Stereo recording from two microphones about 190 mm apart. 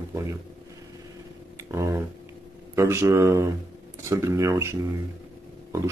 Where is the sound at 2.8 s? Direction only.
15° right (ahead or behind).